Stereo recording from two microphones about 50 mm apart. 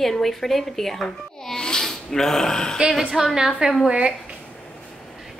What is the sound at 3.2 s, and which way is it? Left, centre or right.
Speech, centre.